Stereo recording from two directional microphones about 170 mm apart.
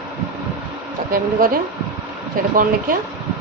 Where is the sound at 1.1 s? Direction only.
55° right (ahead or behind).